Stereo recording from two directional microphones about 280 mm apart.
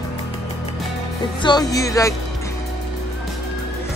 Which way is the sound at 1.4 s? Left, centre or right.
Centre.